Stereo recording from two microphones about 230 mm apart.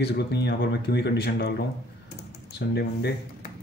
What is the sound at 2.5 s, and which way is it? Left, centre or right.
Speech, left.